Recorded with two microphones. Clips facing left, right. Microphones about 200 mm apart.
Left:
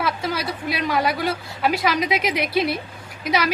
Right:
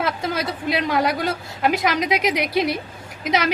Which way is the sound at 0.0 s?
20° right (ahead or behind).